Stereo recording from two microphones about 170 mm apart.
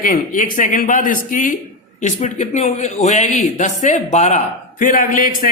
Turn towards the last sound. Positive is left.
turn(degrees=50)  # may be behind; listen again after turning